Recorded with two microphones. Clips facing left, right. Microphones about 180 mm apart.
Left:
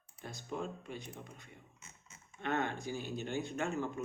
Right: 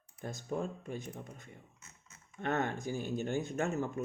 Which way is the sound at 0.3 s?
45° right (ahead or behind).